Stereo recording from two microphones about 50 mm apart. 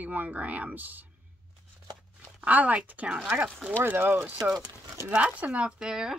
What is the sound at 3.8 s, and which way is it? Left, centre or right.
Speech, right.